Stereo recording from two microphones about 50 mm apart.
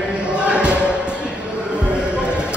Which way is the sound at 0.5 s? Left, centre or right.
Right.